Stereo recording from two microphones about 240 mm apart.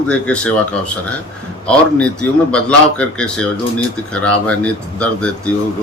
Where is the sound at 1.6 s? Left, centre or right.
Centre.